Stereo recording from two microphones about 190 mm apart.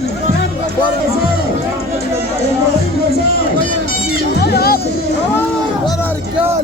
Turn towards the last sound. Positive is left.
turn(degrees=55)  # may be behind; listen again after turning